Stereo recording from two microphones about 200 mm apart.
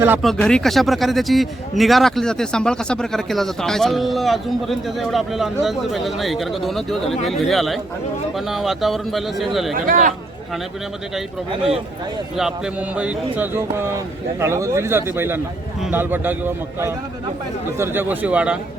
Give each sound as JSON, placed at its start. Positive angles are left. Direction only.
{"t": 0.2, "sound": "a man's voice", "side_deg": 0}
{"t": 9.8, "sound": "speech", "side_deg": -45}
{"t": 12.4, "sound": "speech", "side_deg": -5}